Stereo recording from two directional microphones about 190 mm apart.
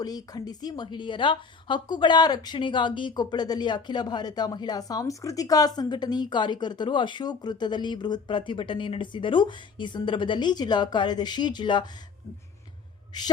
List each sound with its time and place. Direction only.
0.0 s speech: 20° left (ahead or behind)
13.1 s speech: 20° left (ahead or behind)